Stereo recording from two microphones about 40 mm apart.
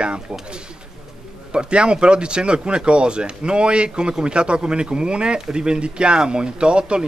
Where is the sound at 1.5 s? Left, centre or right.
Right.